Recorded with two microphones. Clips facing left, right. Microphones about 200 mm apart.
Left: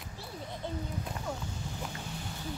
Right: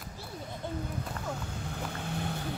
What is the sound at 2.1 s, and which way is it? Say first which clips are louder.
Vehicle: right 5 dB; 60° right (ahead or behind).